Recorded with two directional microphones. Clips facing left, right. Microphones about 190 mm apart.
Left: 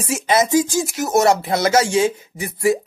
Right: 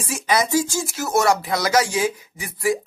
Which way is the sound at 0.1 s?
25° left (ahead or behind).